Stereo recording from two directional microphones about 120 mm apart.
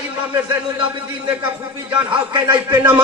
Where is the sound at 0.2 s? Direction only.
15° right (ahead or behind).